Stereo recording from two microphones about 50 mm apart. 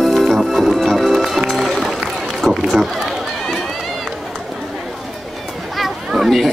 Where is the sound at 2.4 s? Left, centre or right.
Centre.